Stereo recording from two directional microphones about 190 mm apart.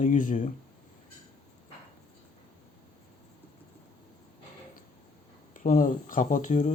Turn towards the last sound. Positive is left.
turn(degrees=35)  # may be behind; listen again after turning